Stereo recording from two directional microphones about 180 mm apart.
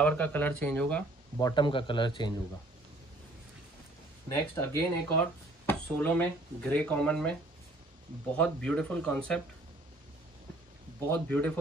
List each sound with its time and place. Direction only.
0.0 s speech: 10° left (ahead or behind)
1.4 s a man's voice: 25° left (ahead or behind)
4.3 s speech: 15° left (ahead or behind)
8.4 s speech: 5° left (ahead or behind)
11.1 s speech: 10° left (ahead or behind)